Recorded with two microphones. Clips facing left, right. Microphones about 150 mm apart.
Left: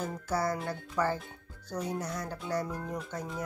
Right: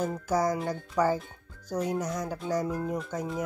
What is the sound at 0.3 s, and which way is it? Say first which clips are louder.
Speech: right 4 dB; 15° right (ahead or behind).